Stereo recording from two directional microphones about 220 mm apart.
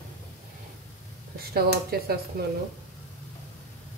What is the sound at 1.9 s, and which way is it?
Speech, 45° right (ahead or behind).